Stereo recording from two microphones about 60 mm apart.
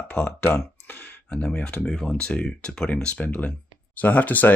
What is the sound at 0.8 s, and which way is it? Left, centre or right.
Speech, left.